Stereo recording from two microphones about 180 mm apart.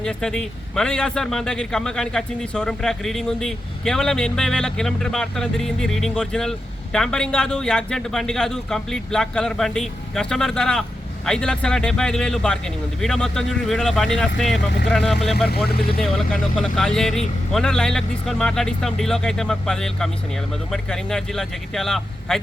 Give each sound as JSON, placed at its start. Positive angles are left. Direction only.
{"t": 0.0, "sound": "speech", "side_deg": 5}
{"t": 15.4, "sound": "speech", "side_deg": 60}
{"t": 16.0, "sound": "speech", "side_deg": 0}